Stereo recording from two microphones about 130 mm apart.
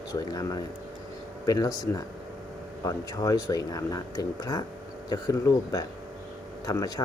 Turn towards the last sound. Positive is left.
turn(degrees=25)  # may be behind; listen again after turning